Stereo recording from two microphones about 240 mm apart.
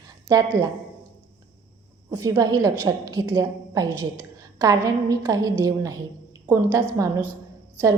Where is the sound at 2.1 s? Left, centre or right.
Centre.